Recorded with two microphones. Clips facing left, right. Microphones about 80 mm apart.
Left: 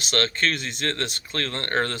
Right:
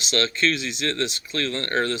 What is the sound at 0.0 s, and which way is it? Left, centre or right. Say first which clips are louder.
Speech: right 1 dB; left.